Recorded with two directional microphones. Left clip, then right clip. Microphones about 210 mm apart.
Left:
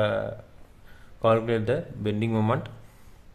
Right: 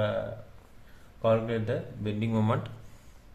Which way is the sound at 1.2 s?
35° left (ahead or behind).